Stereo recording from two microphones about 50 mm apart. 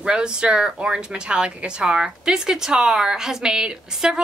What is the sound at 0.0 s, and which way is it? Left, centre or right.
A woman's voice, centre.